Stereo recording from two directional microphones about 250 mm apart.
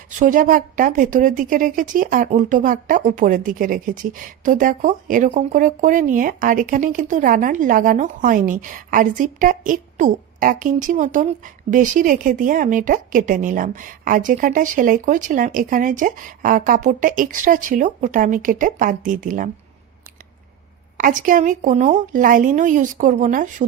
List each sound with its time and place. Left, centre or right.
0.1 s speech: right
21.0 s speech: right